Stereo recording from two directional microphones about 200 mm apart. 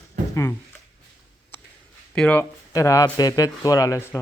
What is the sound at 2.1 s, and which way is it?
Speech, 5° left (ahead or behind).